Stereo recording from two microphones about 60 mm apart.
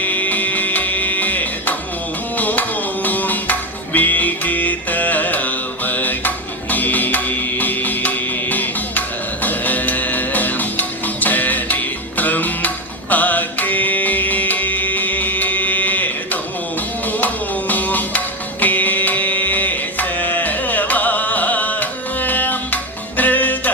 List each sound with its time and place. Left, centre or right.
0.0 s music: left